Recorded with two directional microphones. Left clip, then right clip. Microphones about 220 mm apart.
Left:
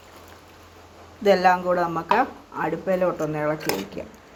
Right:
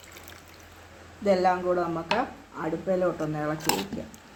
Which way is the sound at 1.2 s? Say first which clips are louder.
Left 5 dB; 20° left (ahead or behind).